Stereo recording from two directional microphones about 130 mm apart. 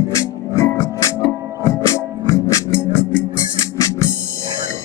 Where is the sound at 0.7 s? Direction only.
25° left (ahead or behind).